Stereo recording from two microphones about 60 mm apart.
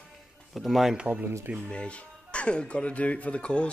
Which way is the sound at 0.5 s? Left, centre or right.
Centre.